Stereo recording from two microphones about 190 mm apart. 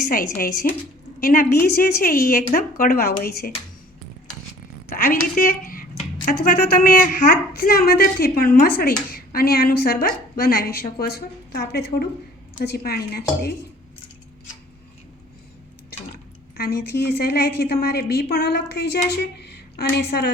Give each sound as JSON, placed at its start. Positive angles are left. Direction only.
{"t": 0.1, "sound": "a woman's voice", "side_deg": 45}
{"t": 4.9, "sound": "a woman's voice", "side_deg": 50}
{"t": 16.6, "sound": "a woman's voice", "side_deg": 55}